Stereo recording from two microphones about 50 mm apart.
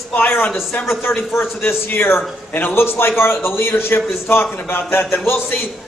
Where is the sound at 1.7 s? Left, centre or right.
Left.